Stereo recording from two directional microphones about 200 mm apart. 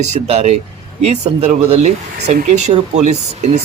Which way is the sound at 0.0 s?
35° right (ahead or behind).